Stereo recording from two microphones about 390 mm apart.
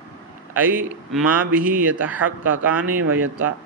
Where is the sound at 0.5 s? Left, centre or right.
Centre.